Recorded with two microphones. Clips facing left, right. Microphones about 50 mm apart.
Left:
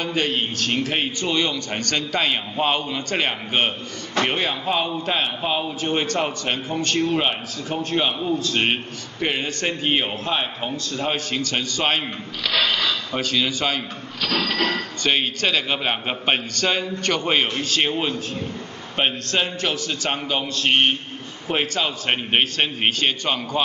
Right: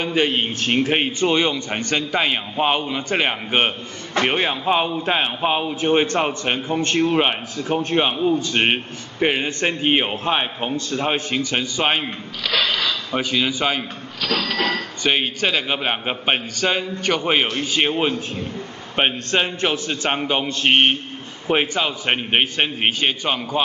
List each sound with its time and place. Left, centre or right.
0.0 s a man's voice: right
14.2 s a sound: centre
14.6 s a man's voice: centre